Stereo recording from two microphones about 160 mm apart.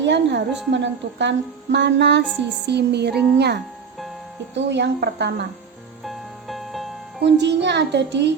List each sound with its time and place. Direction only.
0.0 s a woman's voice: 90° right
6.1 s music: centre (ahead or behind)
7.2 s a woman's voice: 90° right